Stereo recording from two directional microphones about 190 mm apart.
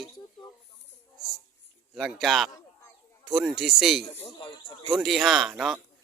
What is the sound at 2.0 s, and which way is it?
Speech, centre (ahead or behind).